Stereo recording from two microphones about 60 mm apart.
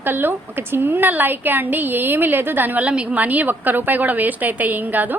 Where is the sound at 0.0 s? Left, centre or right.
Right.